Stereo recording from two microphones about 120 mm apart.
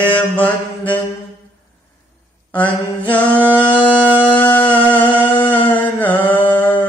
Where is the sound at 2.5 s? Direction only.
15° left (ahead or behind).